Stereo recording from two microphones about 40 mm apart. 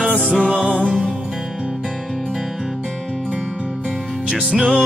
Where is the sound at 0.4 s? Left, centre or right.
Centre.